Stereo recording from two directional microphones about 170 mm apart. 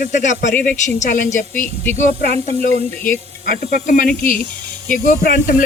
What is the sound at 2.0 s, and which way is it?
Speech, 40° right (ahead or behind).